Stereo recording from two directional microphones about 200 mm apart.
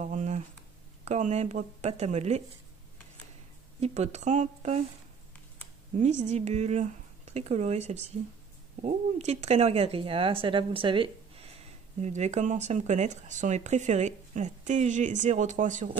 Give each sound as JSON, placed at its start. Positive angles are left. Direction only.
{"t": 0.1, "sound": "speech", "side_deg": -35}
{"t": 3.8, "sound": "speech", "side_deg": -35}
{"t": 5.9, "sound": "speech", "side_deg": -35}